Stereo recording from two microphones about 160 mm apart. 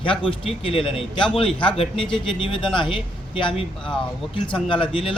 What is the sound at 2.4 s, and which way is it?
Speech, 30° left (ahead or behind).